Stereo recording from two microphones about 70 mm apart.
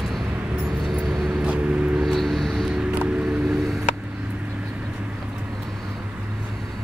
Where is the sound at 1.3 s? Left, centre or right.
Centre.